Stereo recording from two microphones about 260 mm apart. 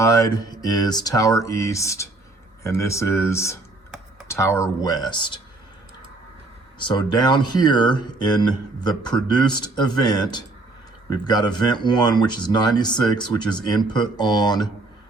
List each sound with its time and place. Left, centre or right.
0.0 s speech: centre
6.7 s speech: centre